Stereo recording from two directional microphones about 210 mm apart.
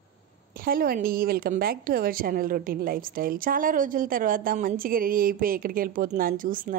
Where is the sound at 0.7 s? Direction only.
45° right (ahead or behind).